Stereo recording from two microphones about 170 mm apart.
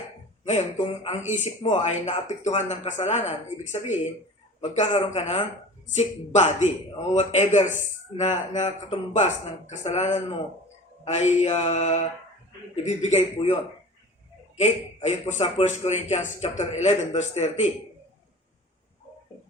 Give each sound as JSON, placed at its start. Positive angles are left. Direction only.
{"t": 0.4, "sound": "a man's voice", "side_deg": 40}
{"t": 4.6, "sound": "mantra", "side_deg": 40}
{"t": 5.9, "sound": "a man's voice", "side_deg": 40}
{"t": 11.0, "sound": "mantra", "side_deg": 40}
{"t": 12.7, "sound": "a man's voice", "side_deg": 40}
{"t": 14.5, "sound": "a man's voice", "side_deg": 45}